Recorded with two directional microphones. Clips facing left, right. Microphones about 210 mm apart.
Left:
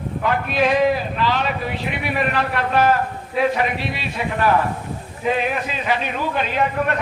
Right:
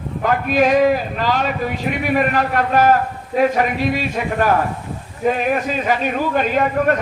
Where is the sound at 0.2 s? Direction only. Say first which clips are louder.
Right 4 dB; 45° right (ahead or behind).